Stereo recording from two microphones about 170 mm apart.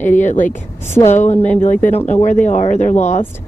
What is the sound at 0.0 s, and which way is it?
Speech, 45° left (ahead or behind).